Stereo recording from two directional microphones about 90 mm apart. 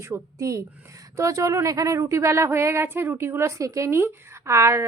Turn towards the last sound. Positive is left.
turn(degrees=-30)  # may be behind; listen again after turning